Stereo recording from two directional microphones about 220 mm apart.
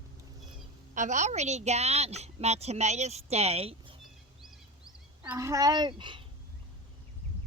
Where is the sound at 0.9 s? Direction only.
35° right (ahead or behind).